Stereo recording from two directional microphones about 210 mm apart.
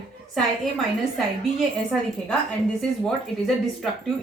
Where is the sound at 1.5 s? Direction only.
Centre (ahead or behind).